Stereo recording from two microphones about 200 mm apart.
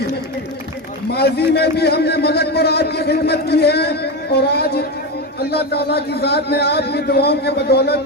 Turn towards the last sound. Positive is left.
turn(degrees=55)  # may be behind; listen again after turning